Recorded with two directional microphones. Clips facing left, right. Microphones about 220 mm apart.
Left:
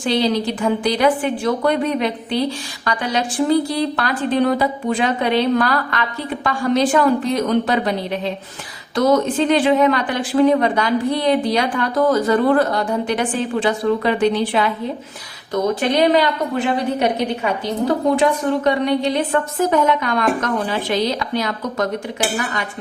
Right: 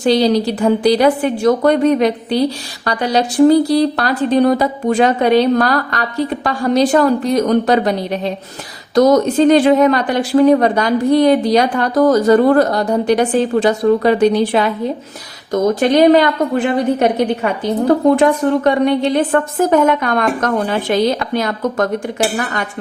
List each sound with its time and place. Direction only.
0.0 s a woman's voice: 40° right (ahead or behind)